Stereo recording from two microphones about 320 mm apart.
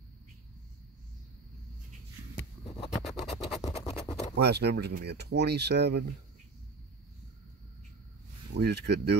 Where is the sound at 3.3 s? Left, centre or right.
Left.